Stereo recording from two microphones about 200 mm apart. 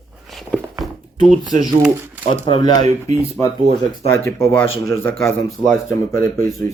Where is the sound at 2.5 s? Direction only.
25° left (ahead or behind).